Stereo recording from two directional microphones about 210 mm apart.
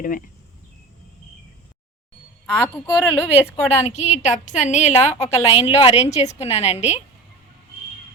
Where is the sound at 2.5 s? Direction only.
5° left (ahead or behind).